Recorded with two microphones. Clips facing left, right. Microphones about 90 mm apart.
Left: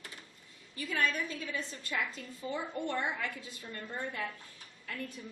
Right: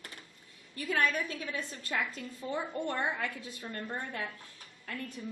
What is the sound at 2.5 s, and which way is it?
A woman's voice, 45° right (ahead or behind).